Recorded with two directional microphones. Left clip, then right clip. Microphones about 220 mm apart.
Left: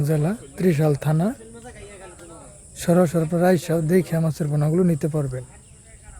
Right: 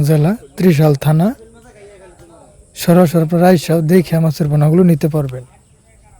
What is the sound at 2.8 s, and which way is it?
Speech, 40° right (ahead or behind).